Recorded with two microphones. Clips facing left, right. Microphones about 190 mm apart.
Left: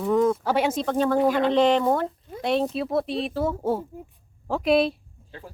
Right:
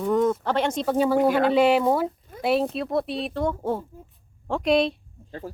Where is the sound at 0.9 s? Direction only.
10° right (ahead or behind).